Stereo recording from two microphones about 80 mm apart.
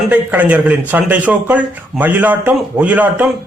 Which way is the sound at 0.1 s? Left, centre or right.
Centre.